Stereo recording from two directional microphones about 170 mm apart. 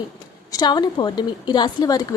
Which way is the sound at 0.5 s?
25° left (ahead or behind).